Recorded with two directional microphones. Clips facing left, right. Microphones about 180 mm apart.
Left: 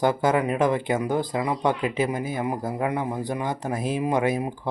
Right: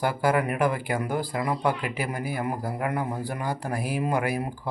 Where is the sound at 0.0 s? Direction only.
20° left (ahead or behind).